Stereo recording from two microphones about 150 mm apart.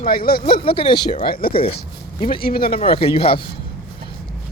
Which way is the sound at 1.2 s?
80° left.